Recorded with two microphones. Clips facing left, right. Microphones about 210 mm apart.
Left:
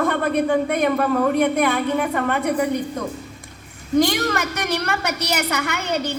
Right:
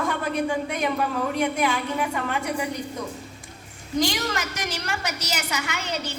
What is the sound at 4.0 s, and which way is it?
A woman's voice, 55° left (ahead or behind).